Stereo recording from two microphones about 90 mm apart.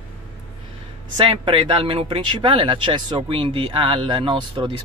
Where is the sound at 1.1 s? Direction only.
70° right (ahead or behind).